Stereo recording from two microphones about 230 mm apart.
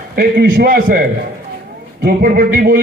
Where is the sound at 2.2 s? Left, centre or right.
Right.